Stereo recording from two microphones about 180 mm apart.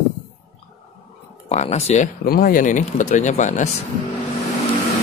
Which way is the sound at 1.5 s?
40° left (ahead or behind).